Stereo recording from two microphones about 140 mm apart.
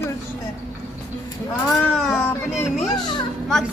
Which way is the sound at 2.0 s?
5° right (ahead or behind).